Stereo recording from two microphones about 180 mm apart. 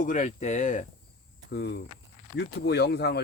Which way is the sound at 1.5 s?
65° left (ahead or behind).